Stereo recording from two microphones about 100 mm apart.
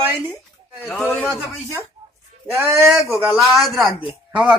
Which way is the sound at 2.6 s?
25° right (ahead or behind).